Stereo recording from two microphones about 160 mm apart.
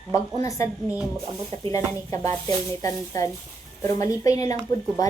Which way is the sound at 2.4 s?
20° left (ahead or behind).